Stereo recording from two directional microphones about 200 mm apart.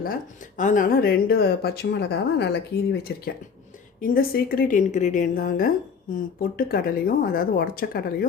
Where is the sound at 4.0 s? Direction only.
45° left (ahead or behind).